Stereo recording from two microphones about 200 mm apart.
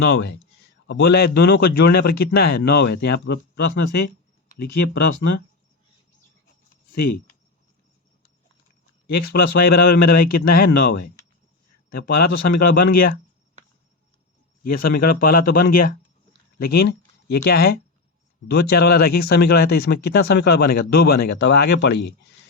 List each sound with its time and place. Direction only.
0.0 s speech: 60° left (ahead or behind)
9.2 s speech: 50° left (ahead or behind)
14.6 s speech: 45° left (ahead or behind)